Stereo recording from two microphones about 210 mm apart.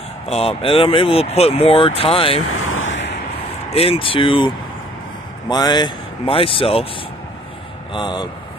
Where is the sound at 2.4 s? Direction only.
85° left; by 3.1 s 60° left (ahead or behind).